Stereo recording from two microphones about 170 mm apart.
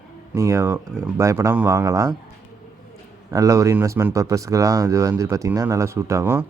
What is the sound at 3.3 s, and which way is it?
A man's voice, 20° right (ahead or behind).